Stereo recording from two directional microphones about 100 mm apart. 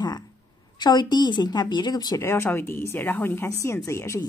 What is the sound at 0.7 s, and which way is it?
Speech, 45° left (ahead or behind).